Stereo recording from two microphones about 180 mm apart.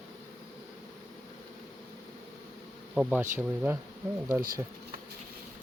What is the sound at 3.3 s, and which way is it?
Speech, 10° right (ahead or behind).